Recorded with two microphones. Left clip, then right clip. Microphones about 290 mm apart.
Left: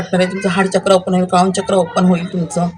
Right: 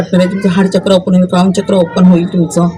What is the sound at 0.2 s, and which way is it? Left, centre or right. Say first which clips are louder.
Speech: right 2 dB; left.